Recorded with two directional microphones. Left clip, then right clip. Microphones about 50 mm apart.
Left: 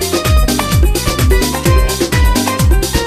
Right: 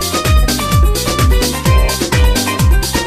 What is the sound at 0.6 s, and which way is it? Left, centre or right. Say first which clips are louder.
Music: even; right.